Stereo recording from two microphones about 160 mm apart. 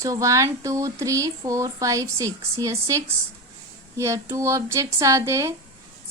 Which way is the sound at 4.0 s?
15° right (ahead or behind).